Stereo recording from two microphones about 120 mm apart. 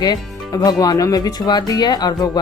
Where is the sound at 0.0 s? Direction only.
35° left (ahead or behind).